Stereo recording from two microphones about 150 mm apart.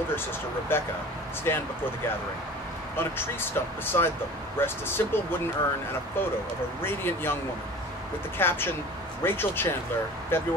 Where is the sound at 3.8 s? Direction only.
15° left (ahead or behind).